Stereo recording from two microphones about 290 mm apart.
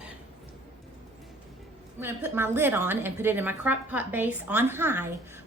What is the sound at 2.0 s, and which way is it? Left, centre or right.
A woman's voice, centre.